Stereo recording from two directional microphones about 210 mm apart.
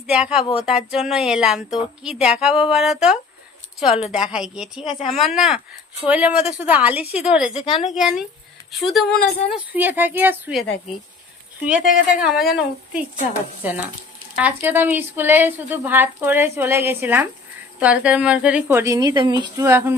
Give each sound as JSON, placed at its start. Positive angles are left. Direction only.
{"t": 0.1, "sound": "a woman's voice", "side_deg": -5}
{"t": 7.5, "sound": "a woman's voice", "side_deg": 25}
{"t": 7.9, "sound": "a woman's voice", "side_deg": 0}
{"t": 11.8, "sound": "a woman's voice", "side_deg": 40}
{"t": 12.2, "sound": "a woman's voice", "side_deg": 0}